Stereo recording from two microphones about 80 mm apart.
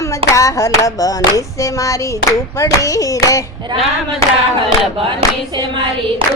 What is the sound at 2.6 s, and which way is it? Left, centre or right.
Hands, left.